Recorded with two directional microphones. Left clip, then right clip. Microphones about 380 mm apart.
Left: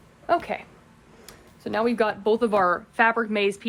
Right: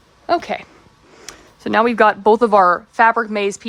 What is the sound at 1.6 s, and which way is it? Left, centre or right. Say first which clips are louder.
A woman's voice: right 10 dB; centre.